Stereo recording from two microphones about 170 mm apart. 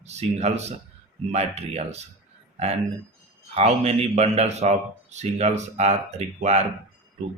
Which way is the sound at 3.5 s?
40° right (ahead or behind).